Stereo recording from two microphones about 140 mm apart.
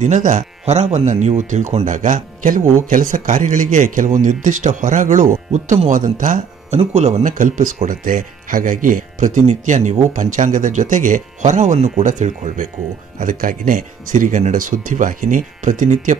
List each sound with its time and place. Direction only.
0.0 s speech: 60° right (ahead or behind)
6.8 s speech: 55° right (ahead or behind)
13.2 s speech: 75° right (ahead or behind)